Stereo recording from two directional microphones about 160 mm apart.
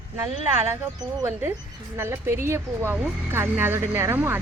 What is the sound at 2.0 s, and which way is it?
Speech, 15° right (ahead or behind).